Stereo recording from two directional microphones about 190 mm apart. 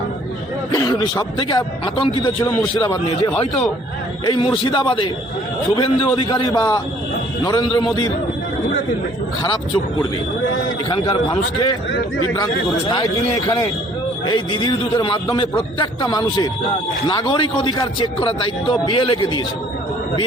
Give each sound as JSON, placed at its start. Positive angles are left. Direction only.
{"t": 0.7, "sound": "a man's voice", "side_deg": 20}
{"t": 9.4, "sound": "a man's voice", "side_deg": 25}
{"t": 12.9, "sound": "a man's voice", "side_deg": 20}